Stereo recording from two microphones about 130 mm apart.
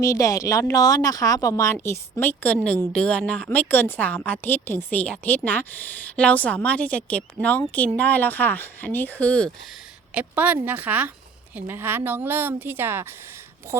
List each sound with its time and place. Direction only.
0.0 s a woman's voice: 25° left (ahead or behind); by 9.5 s 10° left (ahead or behind)
10.2 s a woman's voice: 10° right (ahead or behind)